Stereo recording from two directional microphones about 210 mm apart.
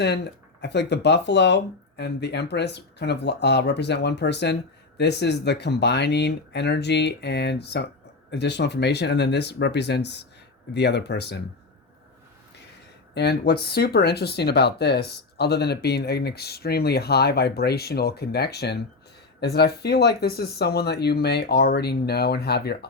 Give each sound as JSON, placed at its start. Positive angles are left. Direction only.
{"t": 0.0, "sound": "speech", "side_deg": 55}
{"t": 13.1, "sound": "speech", "side_deg": 50}